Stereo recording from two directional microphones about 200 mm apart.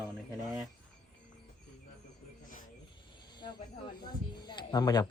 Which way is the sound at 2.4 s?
40° left (ahead or behind).